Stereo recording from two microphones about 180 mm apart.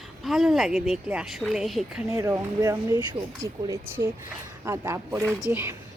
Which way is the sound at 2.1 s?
15° right (ahead or behind).